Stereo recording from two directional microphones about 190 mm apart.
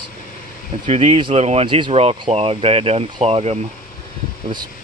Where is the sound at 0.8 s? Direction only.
30° right (ahead or behind).